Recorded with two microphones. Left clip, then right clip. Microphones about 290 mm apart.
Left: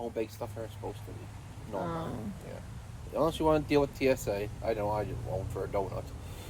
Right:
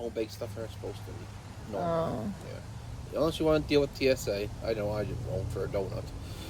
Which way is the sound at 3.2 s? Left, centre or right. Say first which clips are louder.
Even; left.